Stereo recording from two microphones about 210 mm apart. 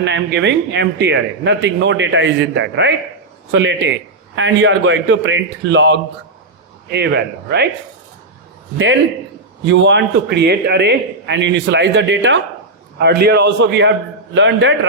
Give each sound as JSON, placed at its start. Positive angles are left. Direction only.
{"t": 0.0, "sound": "a man's voice", "side_deg": -55}
{"t": 9.6, "sound": "a man's voice", "side_deg": -60}